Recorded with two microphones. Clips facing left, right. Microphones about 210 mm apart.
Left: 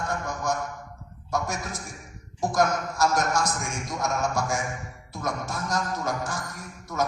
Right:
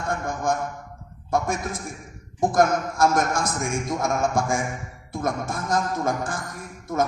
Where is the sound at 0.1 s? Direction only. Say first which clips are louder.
Right 7 dB; 50° right (ahead or behind).